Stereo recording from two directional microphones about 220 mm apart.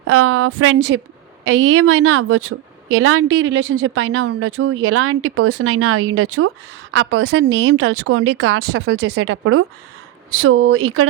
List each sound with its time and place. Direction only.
0.1 s a woman's voice: 70° right (ahead or behind)
0.8 s a woman's voice: 50° right (ahead or behind)
1.5 s a woman's voice: 75° right (ahead or behind)
6.9 s speech: 55° right (ahead or behind)
10.4 s a woman's voice: 70° right (ahead or behind)